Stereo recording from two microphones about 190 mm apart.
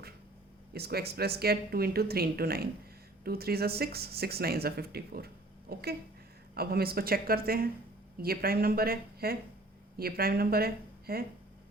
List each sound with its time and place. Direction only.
0.7 s speech: 55° right (ahead or behind)